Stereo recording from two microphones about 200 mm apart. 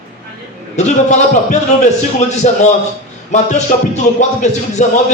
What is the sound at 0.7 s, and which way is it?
A man's voice, 35° left (ahead or behind).